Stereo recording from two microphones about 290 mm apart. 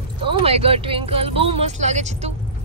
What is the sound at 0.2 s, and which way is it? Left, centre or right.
Speech, centre.